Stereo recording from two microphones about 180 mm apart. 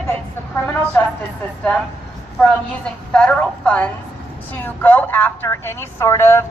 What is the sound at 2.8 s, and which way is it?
A woman's voice, 5° left (ahead or behind).